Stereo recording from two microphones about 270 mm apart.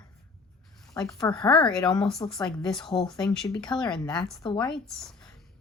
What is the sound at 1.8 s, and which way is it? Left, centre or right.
Speech, centre.